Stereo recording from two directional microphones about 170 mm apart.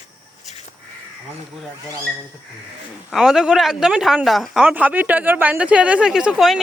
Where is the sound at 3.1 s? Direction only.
Centre (ahead or behind).